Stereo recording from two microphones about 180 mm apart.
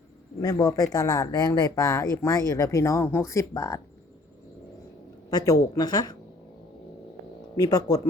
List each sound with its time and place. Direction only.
0.4 s speech: 20° left (ahead or behind)
5.3 s speech: 20° left (ahead or behind)
7.5 s speech: 20° left (ahead or behind)